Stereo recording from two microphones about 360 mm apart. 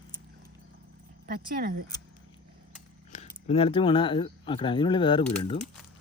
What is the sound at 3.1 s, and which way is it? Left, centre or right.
Speech, centre.